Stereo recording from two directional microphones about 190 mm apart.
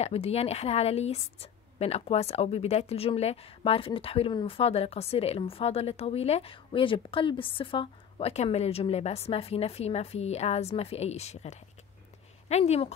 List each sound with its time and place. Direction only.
0.0 s a woman's voice: 35° left (ahead or behind)